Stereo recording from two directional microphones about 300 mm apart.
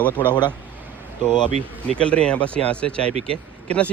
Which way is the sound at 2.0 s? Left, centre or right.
Centre.